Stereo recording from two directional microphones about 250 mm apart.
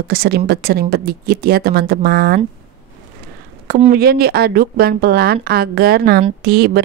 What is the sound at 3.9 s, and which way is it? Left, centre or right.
A woman's voice, right.